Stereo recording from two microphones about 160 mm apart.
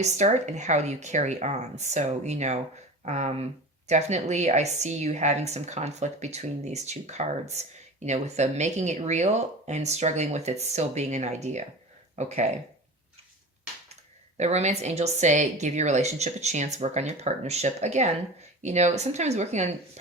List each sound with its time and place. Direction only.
0.0 s a woman's voice: 45° right (ahead or behind)
14.3 s a woman's voice: 45° right (ahead or behind)